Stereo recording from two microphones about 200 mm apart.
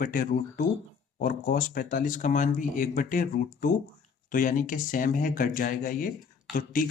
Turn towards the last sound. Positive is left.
turn(degrees=45)  # may be behind; listen again after turning